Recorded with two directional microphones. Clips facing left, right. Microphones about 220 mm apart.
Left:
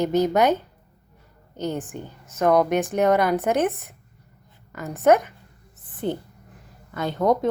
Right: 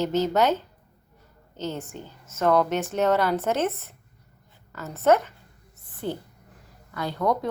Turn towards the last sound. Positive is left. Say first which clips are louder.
# left 4 dB
turn(degrees=20)  # may be behind; listen again after turning